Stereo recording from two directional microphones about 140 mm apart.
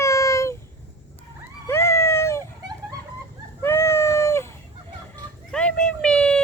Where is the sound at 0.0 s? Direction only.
20° left (ahead or behind).